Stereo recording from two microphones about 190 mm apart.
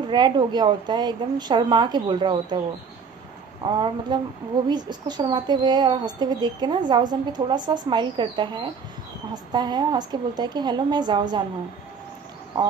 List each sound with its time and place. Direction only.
0.1 s a woman's voice: 25° right (ahead or behind)
3.6 s a woman's voice: 25° right (ahead or behind)